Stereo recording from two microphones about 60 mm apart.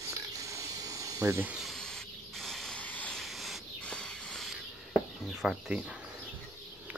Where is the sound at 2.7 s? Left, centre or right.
Left.